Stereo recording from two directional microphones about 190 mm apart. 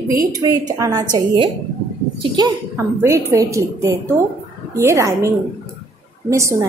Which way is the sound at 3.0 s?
15° right (ahead or behind).